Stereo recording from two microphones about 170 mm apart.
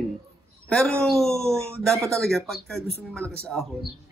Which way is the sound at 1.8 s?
5° left (ahead or behind).